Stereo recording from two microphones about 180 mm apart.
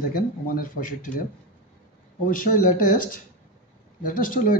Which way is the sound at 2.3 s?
50° left (ahead or behind).